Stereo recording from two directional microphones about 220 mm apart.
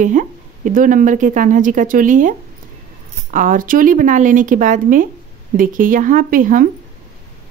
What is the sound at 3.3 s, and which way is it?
Speech, 35° right (ahead or behind).